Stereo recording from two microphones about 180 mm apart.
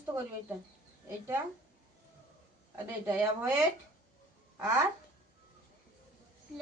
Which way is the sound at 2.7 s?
10° right (ahead or behind).